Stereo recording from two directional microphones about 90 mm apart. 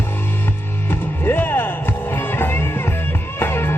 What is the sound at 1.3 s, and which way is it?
Music, 25° left (ahead or behind).